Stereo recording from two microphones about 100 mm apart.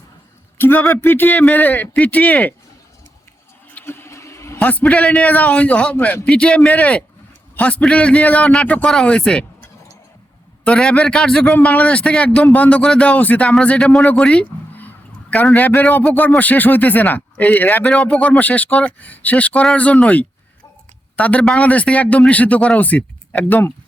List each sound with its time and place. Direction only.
0.6 s speech: 20° left (ahead or behind)
3.8 s a man's voice: 20° left (ahead or behind)
10.6 s speech: 10° left (ahead or behind)